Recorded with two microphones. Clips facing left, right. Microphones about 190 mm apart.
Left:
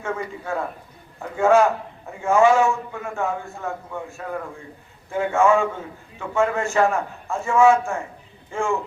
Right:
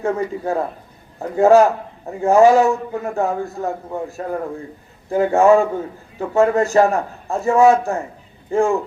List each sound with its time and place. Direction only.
0.0 s a man's voice: 35° right (ahead or behind)